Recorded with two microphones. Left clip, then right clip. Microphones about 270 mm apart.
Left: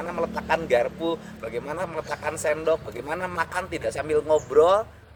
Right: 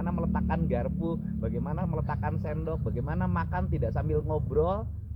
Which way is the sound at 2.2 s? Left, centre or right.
Left.